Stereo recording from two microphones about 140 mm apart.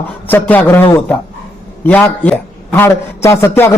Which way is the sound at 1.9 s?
10° left (ahead or behind).